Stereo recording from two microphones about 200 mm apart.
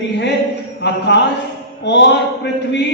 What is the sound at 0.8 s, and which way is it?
A man's voice, 60° left (ahead or behind).